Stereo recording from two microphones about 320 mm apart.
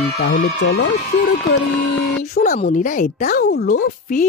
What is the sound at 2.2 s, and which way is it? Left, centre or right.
Speech, left.